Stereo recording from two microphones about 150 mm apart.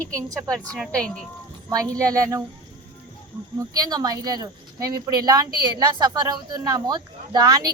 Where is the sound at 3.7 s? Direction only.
25° right (ahead or behind).